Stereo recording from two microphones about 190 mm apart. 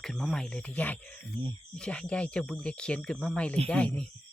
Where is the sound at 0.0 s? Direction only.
5° left (ahead or behind).